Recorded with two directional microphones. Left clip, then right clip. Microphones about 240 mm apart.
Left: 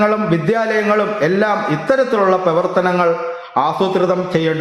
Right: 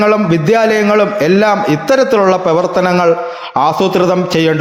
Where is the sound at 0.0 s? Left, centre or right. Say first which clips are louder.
Right 4 dB; right.